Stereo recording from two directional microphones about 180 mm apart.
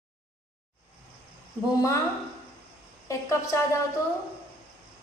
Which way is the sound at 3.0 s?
15° left (ahead or behind).